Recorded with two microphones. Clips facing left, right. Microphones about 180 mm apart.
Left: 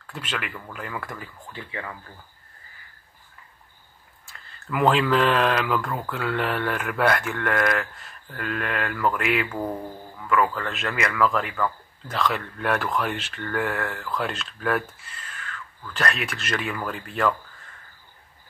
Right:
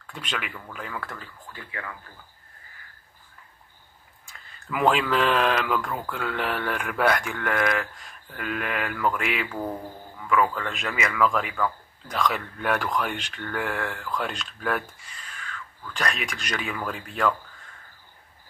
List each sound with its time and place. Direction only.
0.0 s a man's voice: 5° left (ahead or behind)
1.5 s speech: 25° left (ahead or behind)
4.3 s a man's voice: centre (ahead or behind)